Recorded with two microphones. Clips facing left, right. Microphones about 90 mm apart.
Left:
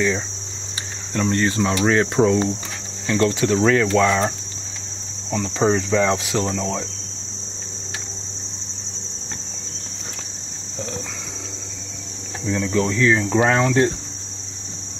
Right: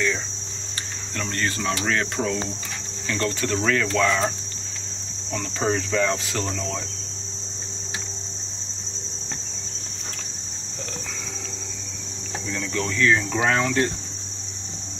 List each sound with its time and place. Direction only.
1.1 s speech: 20° left (ahead or behind)
3.1 s speech: 10° left (ahead or behind)
5.3 s speech: 10° left (ahead or behind)
12.4 s speech: 20° left (ahead or behind)